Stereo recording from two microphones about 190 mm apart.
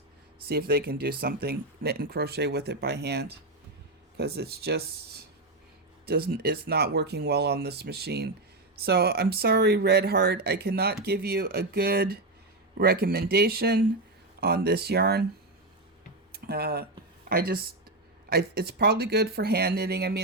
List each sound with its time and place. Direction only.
0.4 s speech: 55° right (ahead or behind)
16.3 s speech: 55° right (ahead or behind)